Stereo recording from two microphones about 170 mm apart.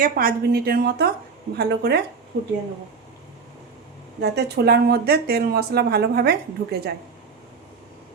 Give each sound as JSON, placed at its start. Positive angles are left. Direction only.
{"t": 0.0, "sound": "a woman's voice", "side_deg": -55}
{"t": 4.2, "sound": "speech", "side_deg": -75}